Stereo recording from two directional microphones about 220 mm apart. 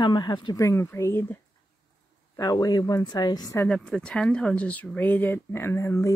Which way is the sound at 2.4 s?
15° left (ahead or behind).